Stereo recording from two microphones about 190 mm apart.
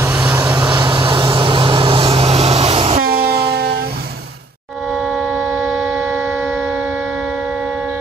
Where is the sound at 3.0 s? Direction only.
55° right (ahead or behind).